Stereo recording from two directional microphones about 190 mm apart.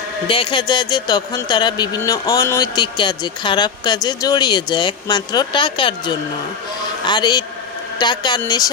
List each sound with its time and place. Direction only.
0.3 s a man's voice: 25° left (ahead or behind)